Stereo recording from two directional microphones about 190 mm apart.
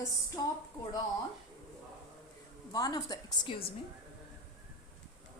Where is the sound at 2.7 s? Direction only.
20° left (ahead or behind).